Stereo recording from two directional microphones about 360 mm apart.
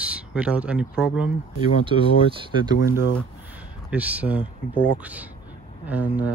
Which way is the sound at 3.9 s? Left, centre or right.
Centre.